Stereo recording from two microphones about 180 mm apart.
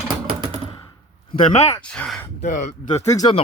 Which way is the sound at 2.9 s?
20° left (ahead or behind).